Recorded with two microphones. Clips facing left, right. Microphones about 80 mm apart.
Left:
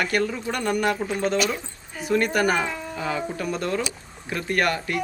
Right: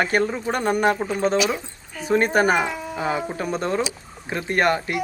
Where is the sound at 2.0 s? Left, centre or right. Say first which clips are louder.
Right 3 dB; right.